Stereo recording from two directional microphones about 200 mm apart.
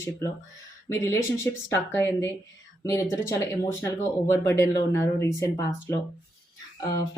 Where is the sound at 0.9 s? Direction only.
15° left (ahead or behind).